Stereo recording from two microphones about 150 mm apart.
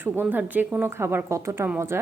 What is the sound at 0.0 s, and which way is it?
A woman's voice, 15° right (ahead or behind).